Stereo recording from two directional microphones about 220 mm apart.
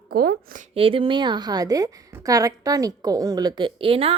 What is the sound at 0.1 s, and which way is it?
Speech, 45° right (ahead or behind).